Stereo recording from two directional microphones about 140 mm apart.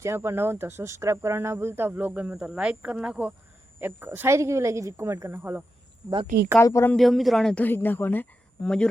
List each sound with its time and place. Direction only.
0.0 s speech: 20° right (ahead or behind)
6.6 s speech: 20° left (ahead or behind)
6.9 s a woman's voice: centre (ahead or behind)